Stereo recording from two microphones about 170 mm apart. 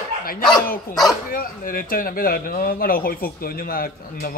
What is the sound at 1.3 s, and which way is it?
A man's voice, 55° left (ahead or behind).